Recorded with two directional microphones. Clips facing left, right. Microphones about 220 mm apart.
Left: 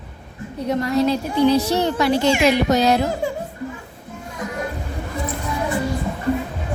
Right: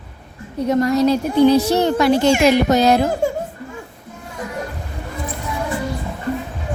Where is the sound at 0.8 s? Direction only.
40° right (ahead or behind).